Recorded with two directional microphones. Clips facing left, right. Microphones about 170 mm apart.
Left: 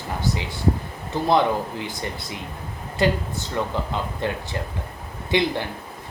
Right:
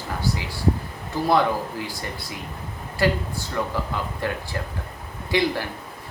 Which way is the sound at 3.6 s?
20° left (ahead or behind).